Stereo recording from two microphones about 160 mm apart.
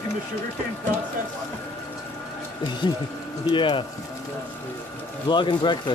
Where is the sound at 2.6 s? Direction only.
30° left (ahead or behind).